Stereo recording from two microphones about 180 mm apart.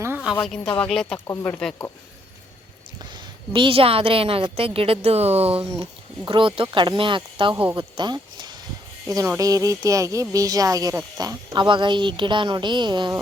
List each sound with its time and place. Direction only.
0.0 s a sound: 10° right (ahead or behind)
0.4 s speech: centre (ahead or behind)
1.3 s speech: 15° left (ahead or behind)
1.5 s speech: 5° left (ahead or behind)
3.0 s a woman's voice: 25° right (ahead or behind)
7.5 s speech: 15° right (ahead or behind)